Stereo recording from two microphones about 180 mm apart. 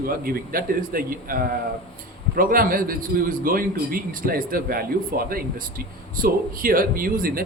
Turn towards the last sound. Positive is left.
turn(degrees=-55)  # may be behind; listen again after turning